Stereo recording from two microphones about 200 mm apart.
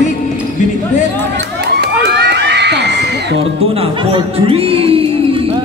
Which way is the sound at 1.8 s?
55° right (ahead or behind).